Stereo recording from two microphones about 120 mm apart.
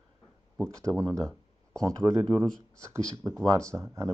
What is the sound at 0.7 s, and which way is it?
Speech, 25° right (ahead or behind).